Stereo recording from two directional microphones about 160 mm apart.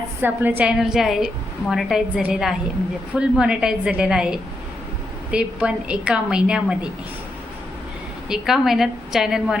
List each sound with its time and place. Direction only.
0.2 s a woman's voice: 10° right (ahead or behind)
8.3 s a woman's voice: centre (ahead or behind)